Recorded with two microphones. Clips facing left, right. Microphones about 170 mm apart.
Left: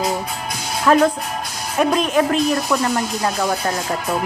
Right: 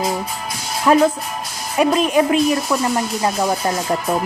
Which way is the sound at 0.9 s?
5° right (ahead or behind).